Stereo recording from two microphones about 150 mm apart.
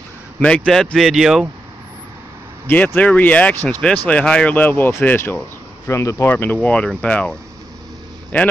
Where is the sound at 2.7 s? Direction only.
10° left (ahead or behind).